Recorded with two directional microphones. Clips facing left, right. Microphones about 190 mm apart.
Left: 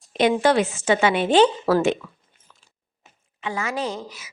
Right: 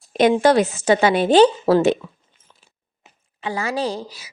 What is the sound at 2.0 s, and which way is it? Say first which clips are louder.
Speech: right 3 dB; 25° right (ahead or behind).